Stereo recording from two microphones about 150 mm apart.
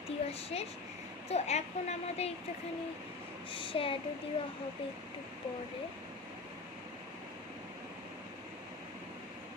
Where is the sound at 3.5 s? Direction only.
35° left (ahead or behind).